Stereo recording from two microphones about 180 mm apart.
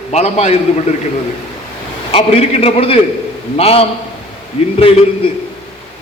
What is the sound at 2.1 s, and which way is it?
A man's voice, 35° left (ahead or behind).